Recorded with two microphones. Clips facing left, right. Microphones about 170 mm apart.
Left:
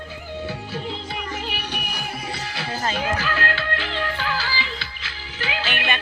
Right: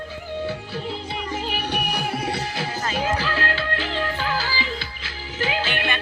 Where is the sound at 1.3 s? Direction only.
40° right (ahead or behind).